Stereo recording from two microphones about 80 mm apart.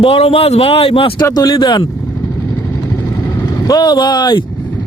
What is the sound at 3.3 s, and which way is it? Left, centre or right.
Speech, left.